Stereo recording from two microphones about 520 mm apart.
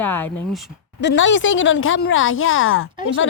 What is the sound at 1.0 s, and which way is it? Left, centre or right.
A woman's voice, left.